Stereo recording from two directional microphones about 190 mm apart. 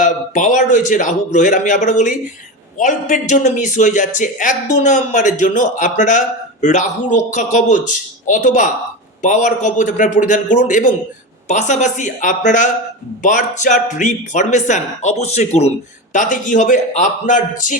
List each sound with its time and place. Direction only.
0.0 s a man's voice: 40° left (ahead or behind)